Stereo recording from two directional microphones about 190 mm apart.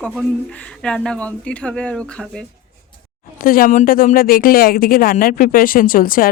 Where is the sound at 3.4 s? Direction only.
50° left (ahead or behind).